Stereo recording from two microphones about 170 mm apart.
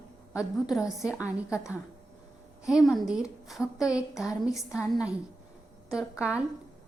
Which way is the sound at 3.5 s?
5° right (ahead or behind).